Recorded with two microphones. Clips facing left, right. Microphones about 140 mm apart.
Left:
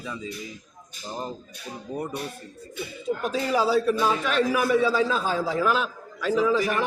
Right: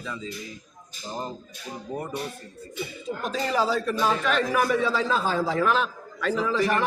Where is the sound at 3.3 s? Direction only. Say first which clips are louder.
Left 2 dB; 5° left (ahead or behind).